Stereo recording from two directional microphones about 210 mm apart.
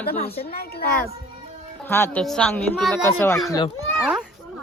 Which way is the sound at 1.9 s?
10° left (ahead or behind).